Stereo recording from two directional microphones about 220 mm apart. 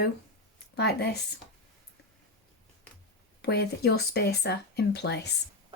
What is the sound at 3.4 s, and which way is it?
Speech, 45° left (ahead or behind).